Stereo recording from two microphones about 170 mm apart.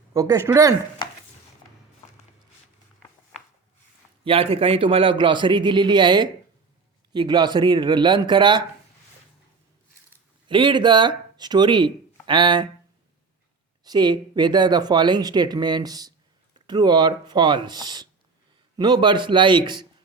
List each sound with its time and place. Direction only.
0.1 s speech: 20° right (ahead or behind)
4.2 s speech: 30° right (ahead or behind)
10.5 s speech: 30° right (ahead or behind)
13.8 s speech: 25° right (ahead or behind)